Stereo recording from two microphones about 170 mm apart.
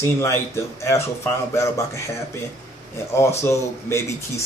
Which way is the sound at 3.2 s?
15° left (ahead or behind).